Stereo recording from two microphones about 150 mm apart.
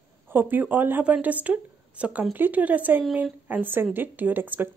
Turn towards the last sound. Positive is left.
turn(degrees=-15)  # may be behind; listen again after turning